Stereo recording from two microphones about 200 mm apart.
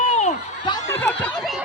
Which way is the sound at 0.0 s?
35° left (ahead or behind).